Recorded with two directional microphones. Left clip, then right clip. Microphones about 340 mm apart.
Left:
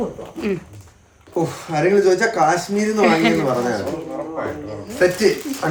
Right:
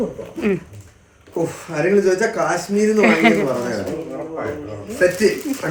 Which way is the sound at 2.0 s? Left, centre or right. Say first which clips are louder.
Left 1 dB; left.